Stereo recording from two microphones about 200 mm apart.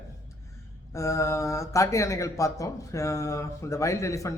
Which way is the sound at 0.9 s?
15° left (ahead or behind).